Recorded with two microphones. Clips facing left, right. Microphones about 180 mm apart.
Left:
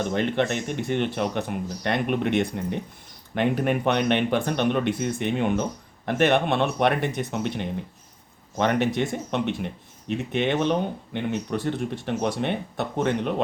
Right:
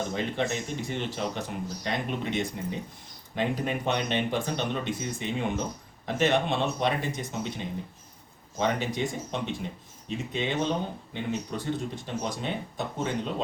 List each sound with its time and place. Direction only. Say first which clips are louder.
0.1 s speech: left 5 dB; 65° left (ahead or behind)